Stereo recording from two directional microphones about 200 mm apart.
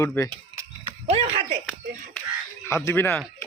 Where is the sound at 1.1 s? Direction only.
30° right (ahead or behind).